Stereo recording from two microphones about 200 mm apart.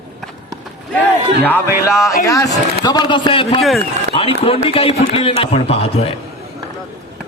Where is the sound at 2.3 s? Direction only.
15° left (ahead or behind).